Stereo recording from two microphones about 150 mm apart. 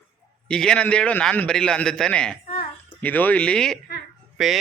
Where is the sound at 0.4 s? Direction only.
5° left (ahead or behind).